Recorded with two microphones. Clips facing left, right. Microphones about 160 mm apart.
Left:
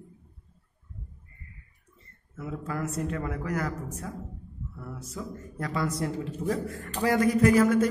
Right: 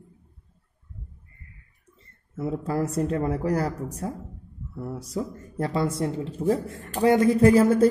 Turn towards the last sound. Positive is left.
turn(degrees=-30)  # may be behind; listen again after turning